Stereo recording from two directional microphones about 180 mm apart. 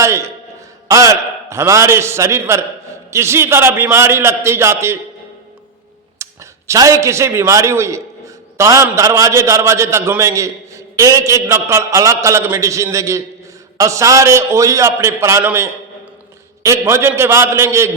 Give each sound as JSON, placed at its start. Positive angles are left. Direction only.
{"t": 0.0, "sound": "a man's voice", "side_deg": -15}
{"t": 6.1, "sound": "a man's voice", "side_deg": -15}